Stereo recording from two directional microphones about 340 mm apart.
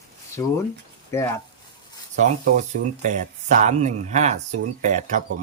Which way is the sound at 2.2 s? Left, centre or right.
Right.